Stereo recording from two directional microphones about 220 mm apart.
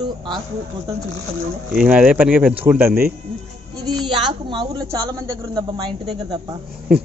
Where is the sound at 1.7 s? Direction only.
5° right (ahead or behind); by 5.9 s 20° right (ahead or behind).